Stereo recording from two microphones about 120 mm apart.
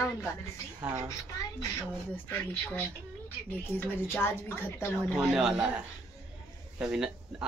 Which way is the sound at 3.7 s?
20° left (ahead or behind).